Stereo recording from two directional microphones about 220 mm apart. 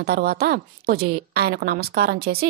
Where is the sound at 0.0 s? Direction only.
45° right (ahead or behind).